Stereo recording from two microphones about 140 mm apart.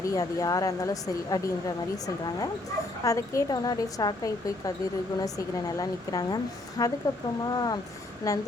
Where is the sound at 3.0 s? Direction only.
25° left (ahead or behind).